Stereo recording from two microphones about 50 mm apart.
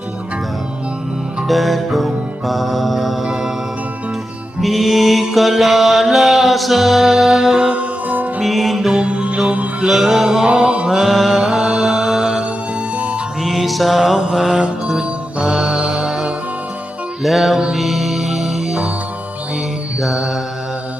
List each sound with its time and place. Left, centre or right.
1.5 s music: centre
4.6 s mantra: centre
7.8 s music: right
8.4 s music: centre
9.0 s music: right
9.8 s mantra: centre
10.9 s mantra: centre
13.0 s music: right
13.4 s music: centre
14.2 s mantra: centre
17.2 s mantra: centre
17.7 s music: centre
20.0 s mantra: centre